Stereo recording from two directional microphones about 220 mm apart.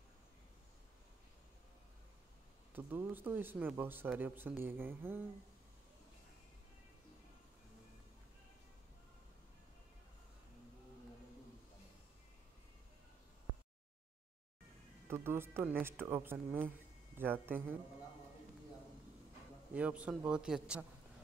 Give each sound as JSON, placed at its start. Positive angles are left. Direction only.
{"t": 2.7, "sound": "speech", "side_deg": -10}
{"t": 15.0, "sound": "speech", "side_deg": -10}
{"t": 19.7, "sound": "a man's voice", "side_deg": -5}